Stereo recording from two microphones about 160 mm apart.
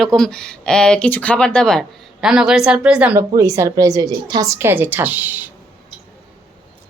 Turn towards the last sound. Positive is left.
turn(degrees=-10)  # may be behind; listen again after turning